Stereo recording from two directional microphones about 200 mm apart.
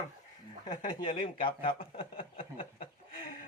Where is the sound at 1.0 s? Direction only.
25° left (ahead or behind).